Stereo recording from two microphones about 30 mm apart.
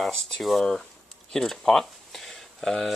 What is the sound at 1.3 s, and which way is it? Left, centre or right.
Speech, centre.